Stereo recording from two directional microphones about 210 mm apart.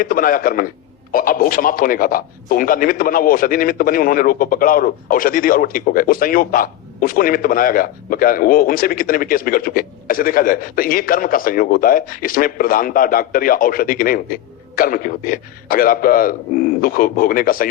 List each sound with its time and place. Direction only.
0.0 s speech: 40° left (ahead or behind)